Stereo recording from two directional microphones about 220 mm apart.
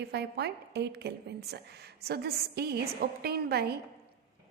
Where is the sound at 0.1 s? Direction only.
50° right (ahead or behind).